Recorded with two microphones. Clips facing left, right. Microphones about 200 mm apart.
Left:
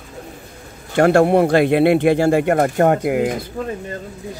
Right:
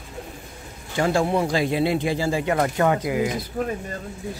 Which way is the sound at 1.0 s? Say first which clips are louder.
Left 8 dB; 65° left (ahead or behind).